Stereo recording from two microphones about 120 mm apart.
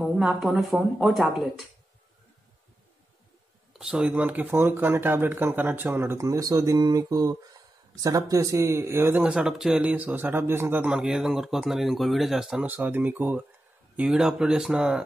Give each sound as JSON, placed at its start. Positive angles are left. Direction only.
{"t": 0.0, "sound": "speech", "side_deg": -5}
{"t": 3.7, "sound": "speech", "side_deg": -5}
{"t": 9.2, "sound": "a man's voice", "side_deg": -5}
{"t": 11.0, "sound": "speech", "side_deg": -5}
{"t": 12.6, "sound": "a man's voice", "side_deg": -15}